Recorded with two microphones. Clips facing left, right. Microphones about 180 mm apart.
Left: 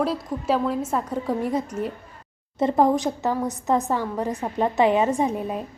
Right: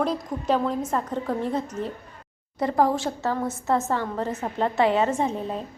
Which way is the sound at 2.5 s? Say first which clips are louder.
Left 3 dB; 20° left (ahead or behind).